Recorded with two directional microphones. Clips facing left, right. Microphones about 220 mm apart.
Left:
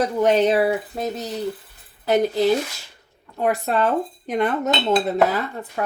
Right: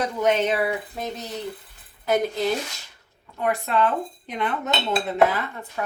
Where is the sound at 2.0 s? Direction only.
35° left (ahead or behind).